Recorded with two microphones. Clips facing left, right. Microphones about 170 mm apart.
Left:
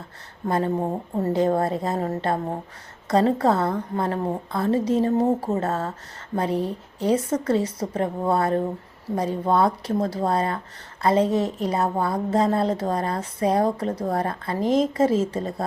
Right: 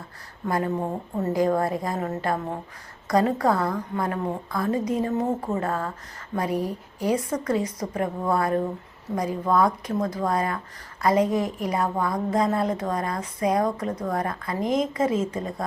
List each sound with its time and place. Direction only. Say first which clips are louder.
0.4 s a woman's voice: left 2 dB; 30° left (ahead or behind)